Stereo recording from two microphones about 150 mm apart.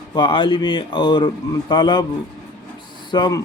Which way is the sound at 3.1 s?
30° left (ahead or behind).